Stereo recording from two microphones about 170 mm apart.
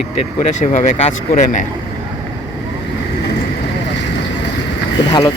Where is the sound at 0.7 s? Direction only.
40° left (ahead or behind).